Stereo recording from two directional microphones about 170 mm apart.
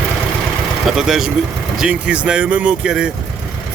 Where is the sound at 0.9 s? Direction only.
5° right (ahead or behind).